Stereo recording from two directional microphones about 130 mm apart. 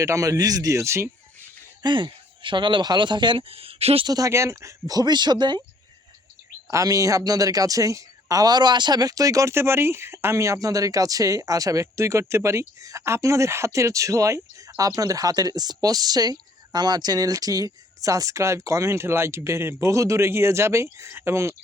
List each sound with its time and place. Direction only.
0.0 s speech: 25° right (ahead or behind)
1.8 s speech: 40° right (ahead or behind)
4.0 s speech: 25° right (ahead or behind)
6.7 s speech: 25° right (ahead or behind)